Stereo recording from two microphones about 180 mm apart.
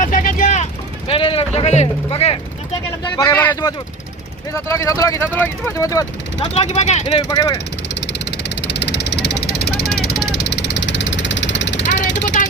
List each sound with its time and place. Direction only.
0.0 s vehicle: 50° left (ahead or behind); by 2.4 s 30° left (ahead or behind)
3.2 s speech: 15° left (ahead or behind)
6.5 s speech: 35° left (ahead or behind)
7.2 s speech: 20° left (ahead or behind)
8.0 s vehicle: 70° left (ahead or behind)
12.4 s a sound: 45° left (ahead or behind)